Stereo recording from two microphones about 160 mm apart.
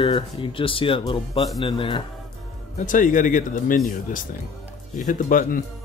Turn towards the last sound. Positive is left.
turn(degrees=55)  # may be behind; listen again after turning